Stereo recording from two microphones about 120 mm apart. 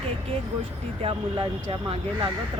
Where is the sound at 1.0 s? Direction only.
55° right (ahead or behind).